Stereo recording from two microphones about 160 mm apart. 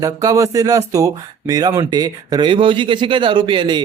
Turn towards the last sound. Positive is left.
turn(degrees=-30)  # may be behind; listen again after turning